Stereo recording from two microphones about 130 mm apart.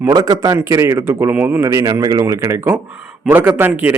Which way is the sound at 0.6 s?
20° right (ahead or behind).